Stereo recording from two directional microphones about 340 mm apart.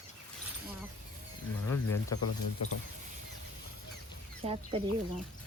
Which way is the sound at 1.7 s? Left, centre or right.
Centre.